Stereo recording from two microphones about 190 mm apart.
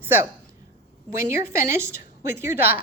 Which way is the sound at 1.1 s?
15° right (ahead or behind).